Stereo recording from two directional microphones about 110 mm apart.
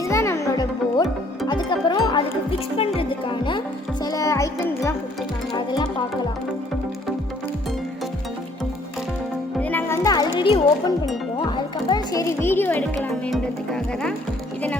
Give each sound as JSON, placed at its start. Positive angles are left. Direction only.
{"t": 0.1, "sound": "music", "side_deg": 25}
{"t": 0.5, "sound": "music", "side_deg": 35}
{"t": 2.7, "sound": "music", "side_deg": 60}
{"t": 4.0, "sound": "music", "side_deg": 30}
{"t": 5.5, "sound": "music", "side_deg": 40}
{"t": 9.6, "sound": "music", "side_deg": 15}
{"t": 9.9, "sound": "music", "side_deg": 35}
{"t": 10.3, "sound": "music", "side_deg": 50}
{"t": 12.4, "sound": "music", "side_deg": 20}